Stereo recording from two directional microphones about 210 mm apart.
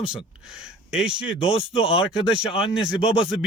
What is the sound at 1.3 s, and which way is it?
Speech, 30° left (ahead or behind).